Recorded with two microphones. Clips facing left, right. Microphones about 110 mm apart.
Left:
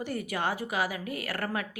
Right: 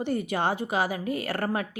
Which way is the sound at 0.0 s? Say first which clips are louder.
Right 5 dB; 25° right (ahead or behind).